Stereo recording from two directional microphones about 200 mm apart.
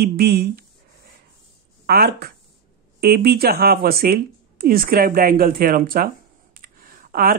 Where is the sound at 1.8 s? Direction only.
50° right (ahead or behind).